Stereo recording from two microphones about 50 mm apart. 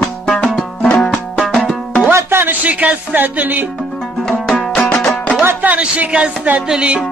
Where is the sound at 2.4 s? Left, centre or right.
Right.